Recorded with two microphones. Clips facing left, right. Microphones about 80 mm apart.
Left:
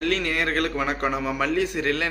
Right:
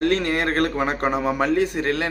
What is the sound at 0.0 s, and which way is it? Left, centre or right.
A man's voice, right.